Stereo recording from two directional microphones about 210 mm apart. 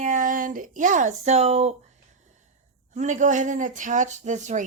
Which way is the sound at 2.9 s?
35° right (ahead or behind).